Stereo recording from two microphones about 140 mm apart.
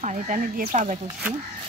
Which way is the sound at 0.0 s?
60° right (ahead or behind).